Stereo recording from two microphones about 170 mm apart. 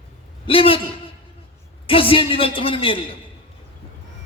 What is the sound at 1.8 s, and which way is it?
A man's voice, 30° left (ahead or behind).